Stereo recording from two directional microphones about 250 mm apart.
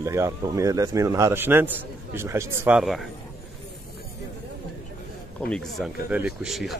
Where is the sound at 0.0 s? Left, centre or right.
Centre.